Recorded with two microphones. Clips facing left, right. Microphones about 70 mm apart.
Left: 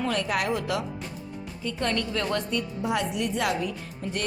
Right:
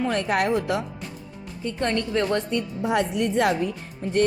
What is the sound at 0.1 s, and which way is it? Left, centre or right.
Speech, right.